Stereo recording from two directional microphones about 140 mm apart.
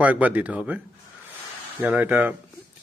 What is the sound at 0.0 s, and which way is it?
Speech, 10° right (ahead or behind).